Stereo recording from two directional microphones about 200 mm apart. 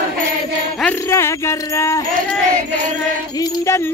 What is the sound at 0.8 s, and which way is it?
Speech, 10° left (ahead or behind).